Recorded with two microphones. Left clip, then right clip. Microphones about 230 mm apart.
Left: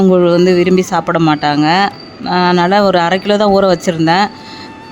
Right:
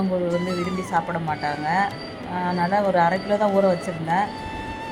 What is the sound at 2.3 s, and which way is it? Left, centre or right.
Speech, left.